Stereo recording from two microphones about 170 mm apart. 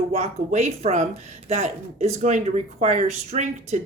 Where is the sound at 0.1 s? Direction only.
40° right (ahead or behind).